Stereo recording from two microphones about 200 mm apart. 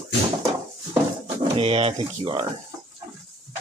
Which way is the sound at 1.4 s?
30° right (ahead or behind).